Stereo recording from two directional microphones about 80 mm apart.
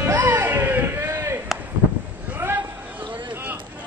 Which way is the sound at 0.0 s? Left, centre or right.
Right.